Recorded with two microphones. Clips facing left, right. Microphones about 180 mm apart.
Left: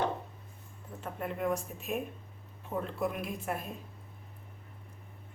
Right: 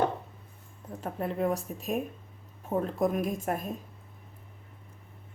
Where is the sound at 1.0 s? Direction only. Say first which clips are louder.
Right 4 dB; 35° right (ahead or behind).